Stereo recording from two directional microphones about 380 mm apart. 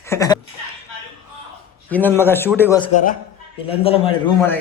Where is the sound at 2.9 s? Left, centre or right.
Left; by 4.6 s centre.